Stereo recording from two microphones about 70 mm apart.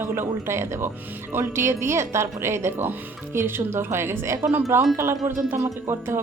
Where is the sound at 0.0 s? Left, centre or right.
Right.